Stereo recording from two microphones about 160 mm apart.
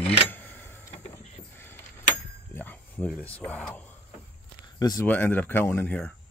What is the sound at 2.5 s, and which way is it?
Speech, 10° left (ahead or behind).